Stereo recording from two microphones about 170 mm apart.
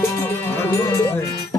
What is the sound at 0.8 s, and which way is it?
Speech, 20° left (ahead or behind).